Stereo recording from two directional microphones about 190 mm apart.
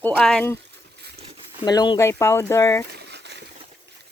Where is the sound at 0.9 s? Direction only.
60° right (ahead or behind).